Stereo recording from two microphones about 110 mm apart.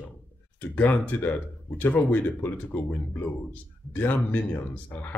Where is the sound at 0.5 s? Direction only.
15° left (ahead or behind).